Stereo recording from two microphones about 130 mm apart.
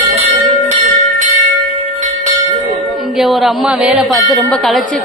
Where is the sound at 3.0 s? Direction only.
Centre (ahead or behind).